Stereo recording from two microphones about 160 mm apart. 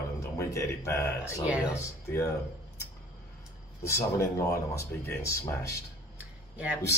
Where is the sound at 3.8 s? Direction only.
20° left (ahead or behind).